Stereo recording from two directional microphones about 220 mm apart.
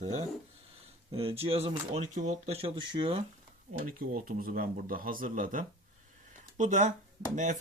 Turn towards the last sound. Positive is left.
turn(degrees=-35)  # may be behind; listen again after turning